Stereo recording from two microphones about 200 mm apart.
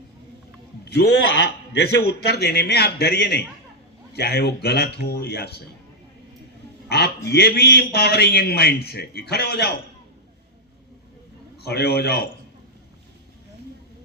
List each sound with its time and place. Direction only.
0.9 s a man's voice: 55° left (ahead or behind)
6.8 s a sound: 55° left (ahead or behind)
7.3 s a man's voice: 55° left (ahead or behind)
11.6 s a man's voice: 55° left (ahead or behind)